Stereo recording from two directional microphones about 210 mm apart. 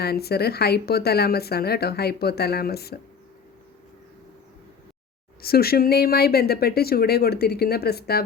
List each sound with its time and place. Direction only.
0.0 s speech: 50° left (ahead or behind)
5.4 s speech: 45° left (ahead or behind)